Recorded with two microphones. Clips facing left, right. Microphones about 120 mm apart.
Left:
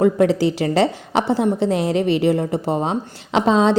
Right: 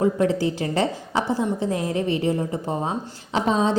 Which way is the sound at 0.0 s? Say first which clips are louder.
Left 5 dB; 90° left.